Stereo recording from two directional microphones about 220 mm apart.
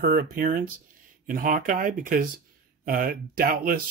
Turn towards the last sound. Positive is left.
turn(degrees=-40)  # may be behind; listen again after turning